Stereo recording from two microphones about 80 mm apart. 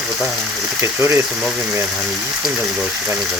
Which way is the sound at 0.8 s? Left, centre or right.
Right.